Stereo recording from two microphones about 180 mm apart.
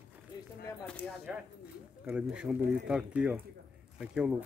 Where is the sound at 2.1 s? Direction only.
5° right (ahead or behind).